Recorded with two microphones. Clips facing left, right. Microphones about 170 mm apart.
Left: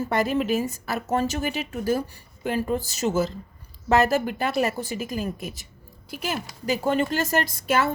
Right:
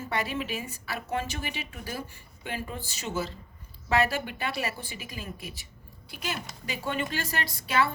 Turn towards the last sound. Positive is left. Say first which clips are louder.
# left 4 dB
turn(degrees=45)  # may be behind; listen again after turning